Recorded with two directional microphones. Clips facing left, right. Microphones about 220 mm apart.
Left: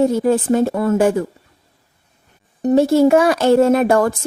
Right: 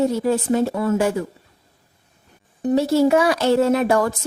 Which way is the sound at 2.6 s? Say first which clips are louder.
Left 4 dB; 45° left (ahead or behind).